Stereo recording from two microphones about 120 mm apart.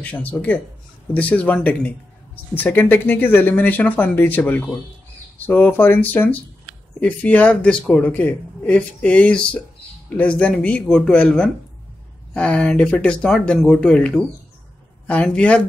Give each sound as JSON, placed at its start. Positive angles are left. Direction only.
{"t": 0.0, "sound": "speech", "side_deg": 15}